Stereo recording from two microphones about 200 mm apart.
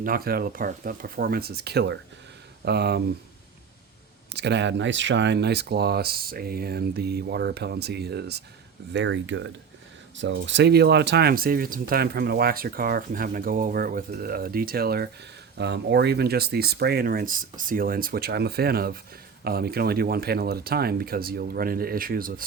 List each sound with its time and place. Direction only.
0.0 s speech: 45° right (ahead or behind)
4.3 s speech: 55° right (ahead or behind)